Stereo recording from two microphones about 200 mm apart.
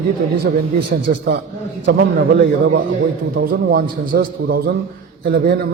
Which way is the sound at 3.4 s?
50° right (ahead or behind).